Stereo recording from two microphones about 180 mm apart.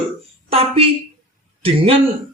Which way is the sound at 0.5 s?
30° right (ahead or behind).